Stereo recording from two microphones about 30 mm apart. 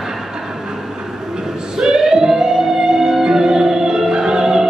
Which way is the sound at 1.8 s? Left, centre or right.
Centre.